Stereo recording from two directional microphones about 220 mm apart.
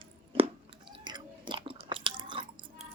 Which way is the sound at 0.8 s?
20° right (ahead or behind).